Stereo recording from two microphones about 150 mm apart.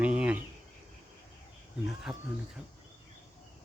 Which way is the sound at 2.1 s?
5° right (ahead or behind).